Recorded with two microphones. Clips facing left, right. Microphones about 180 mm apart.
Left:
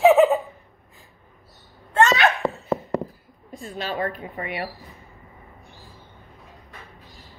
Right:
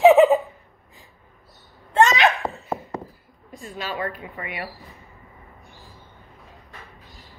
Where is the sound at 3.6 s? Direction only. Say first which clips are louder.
Left 2 dB; 45° left (ahead or behind).